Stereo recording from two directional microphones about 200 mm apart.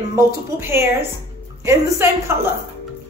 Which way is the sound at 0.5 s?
10° right (ahead or behind).